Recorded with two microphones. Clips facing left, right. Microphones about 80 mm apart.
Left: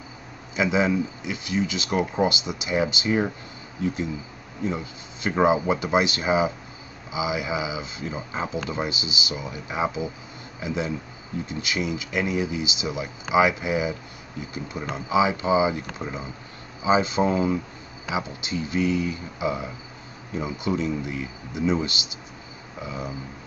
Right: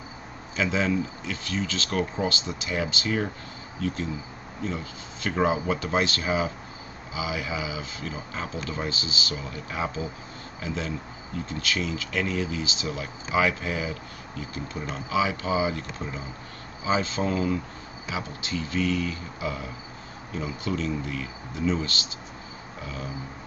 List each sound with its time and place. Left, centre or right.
0.6 s speech: centre